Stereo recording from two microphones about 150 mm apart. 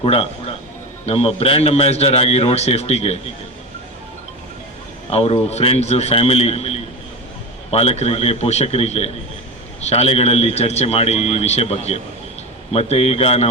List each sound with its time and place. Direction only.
0.0 s a man's voice: 40° left (ahead or behind)
5.1 s a man's voice: 45° left (ahead or behind)